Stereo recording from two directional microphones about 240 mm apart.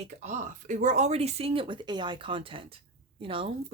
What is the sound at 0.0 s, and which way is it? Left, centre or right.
Speech, right.